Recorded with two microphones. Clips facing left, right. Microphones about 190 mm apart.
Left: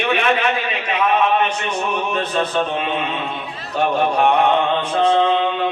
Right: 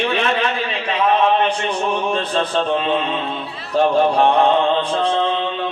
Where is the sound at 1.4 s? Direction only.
30° right (ahead or behind).